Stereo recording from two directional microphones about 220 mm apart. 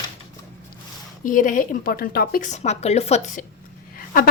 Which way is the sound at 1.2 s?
35° left (ahead or behind).